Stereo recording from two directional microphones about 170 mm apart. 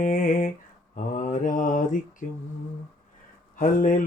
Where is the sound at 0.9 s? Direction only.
50° left (ahead or behind).